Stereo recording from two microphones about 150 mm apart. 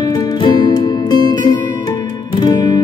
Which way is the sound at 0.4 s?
30° left (ahead or behind).